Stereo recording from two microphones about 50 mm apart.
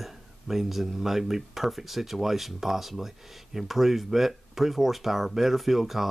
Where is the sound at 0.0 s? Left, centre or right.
Centre.